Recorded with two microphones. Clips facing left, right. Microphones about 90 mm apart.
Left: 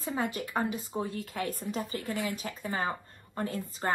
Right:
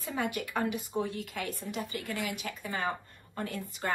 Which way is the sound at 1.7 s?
20° left (ahead or behind).